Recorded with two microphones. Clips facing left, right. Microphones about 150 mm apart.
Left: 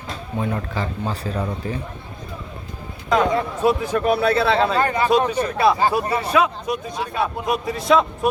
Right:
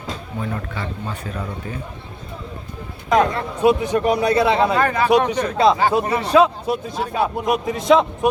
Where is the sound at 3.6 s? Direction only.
15° right (ahead or behind).